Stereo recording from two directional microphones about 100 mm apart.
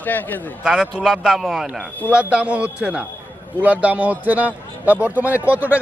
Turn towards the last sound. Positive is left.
turn(degrees=-15)  # may be behind; listen again after turning